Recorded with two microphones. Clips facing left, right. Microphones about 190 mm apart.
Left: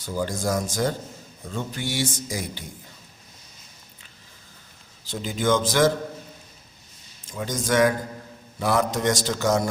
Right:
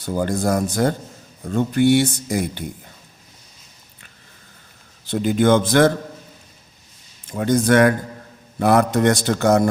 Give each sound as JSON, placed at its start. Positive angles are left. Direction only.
{"t": 0.0, "sound": "speech", "side_deg": -55}
{"t": 5.0, "sound": "speech", "side_deg": -60}
{"t": 7.3, "sound": "speech", "side_deg": -60}